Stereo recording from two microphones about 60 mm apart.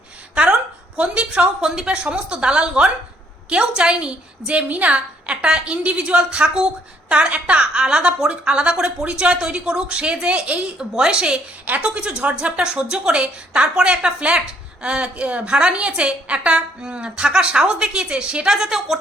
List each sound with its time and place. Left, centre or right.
0.9 s a woman's voice: centre